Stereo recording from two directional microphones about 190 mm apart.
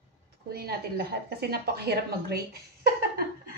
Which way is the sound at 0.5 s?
55° right (ahead or behind).